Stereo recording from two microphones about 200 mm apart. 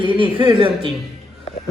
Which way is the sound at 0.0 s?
25° right (ahead or behind).